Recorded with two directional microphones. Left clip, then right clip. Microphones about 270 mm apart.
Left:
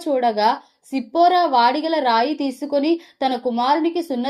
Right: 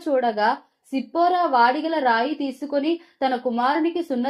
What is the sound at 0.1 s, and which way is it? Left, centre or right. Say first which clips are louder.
A woman's voice: left 3 dB; left.